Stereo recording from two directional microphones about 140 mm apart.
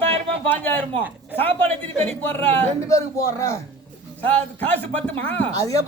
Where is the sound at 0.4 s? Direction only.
15° left (ahead or behind).